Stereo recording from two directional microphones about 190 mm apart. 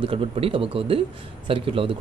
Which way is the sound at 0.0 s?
30° right (ahead or behind).